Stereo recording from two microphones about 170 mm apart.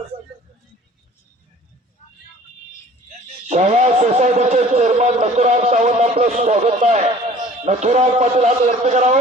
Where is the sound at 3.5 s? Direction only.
40° right (ahead or behind).